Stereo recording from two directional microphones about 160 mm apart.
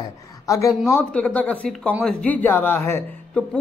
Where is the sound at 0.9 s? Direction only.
10° left (ahead or behind).